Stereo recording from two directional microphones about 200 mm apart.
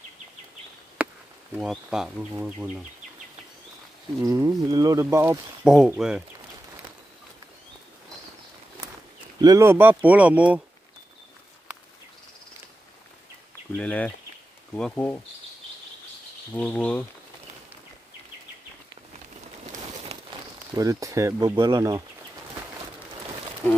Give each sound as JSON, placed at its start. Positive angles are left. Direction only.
{"t": 1.0, "sound": "insect", "side_deg": -5}
{"t": 1.6, "sound": "speech", "side_deg": -5}
{"t": 4.2, "sound": "speech", "side_deg": -15}
{"t": 9.4, "sound": "speech", "side_deg": -15}
{"t": 13.7, "sound": "speech", "side_deg": 5}
{"t": 16.5, "sound": "speech", "side_deg": 5}
{"t": 19.6, "sound": "a sound", "side_deg": -35}
{"t": 20.7, "sound": "speech", "side_deg": -15}